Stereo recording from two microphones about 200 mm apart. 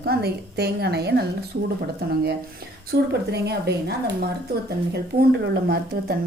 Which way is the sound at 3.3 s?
55° right (ahead or behind).